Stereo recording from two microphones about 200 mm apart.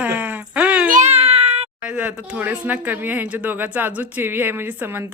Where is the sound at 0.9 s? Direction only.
35° right (ahead or behind).